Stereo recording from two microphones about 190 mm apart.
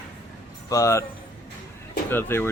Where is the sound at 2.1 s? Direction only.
10° left (ahead or behind).